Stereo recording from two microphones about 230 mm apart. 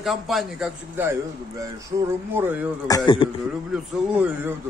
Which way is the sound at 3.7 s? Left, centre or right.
Centre.